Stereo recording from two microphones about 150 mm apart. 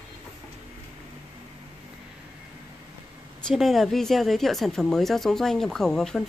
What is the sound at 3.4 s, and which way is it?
A woman's voice, centre (ahead or behind).